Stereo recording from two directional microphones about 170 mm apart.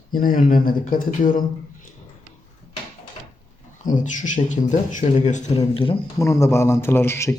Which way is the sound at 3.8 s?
50° left (ahead or behind).